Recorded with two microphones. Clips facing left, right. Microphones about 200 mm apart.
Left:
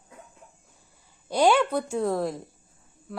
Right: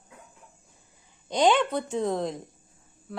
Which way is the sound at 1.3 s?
10° left (ahead or behind).